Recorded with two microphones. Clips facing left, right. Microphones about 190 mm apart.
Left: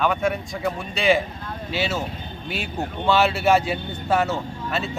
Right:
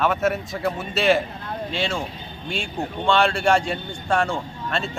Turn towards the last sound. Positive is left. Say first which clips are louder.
# even
turn(degrees=5)  # may be behind; listen again after turning